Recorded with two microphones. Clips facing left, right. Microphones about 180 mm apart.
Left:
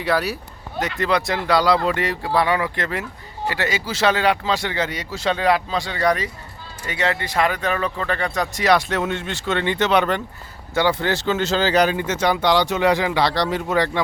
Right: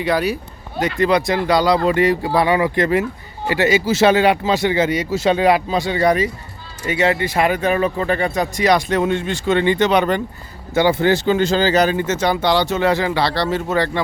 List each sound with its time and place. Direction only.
0.8 s speech: centre (ahead or behind)
2.3 s speech: 20° right (ahead or behind)
6.8 s speech: 10° right (ahead or behind)
8.3 s speech: centre (ahead or behind)
11.9 s speech: 10° left (ahead or behind)